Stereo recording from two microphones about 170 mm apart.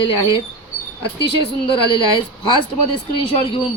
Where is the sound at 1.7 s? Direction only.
30° left (ahead or behind).